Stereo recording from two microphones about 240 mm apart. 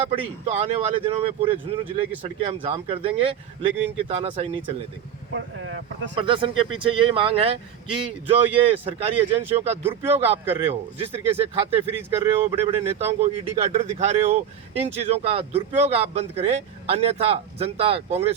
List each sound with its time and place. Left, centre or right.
0.0 s speech: right
5.3 s speech: right
6.1 s speech: right
13.1 s speech: right